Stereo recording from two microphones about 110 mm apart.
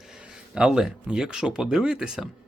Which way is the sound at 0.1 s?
10° right (ahead or behind).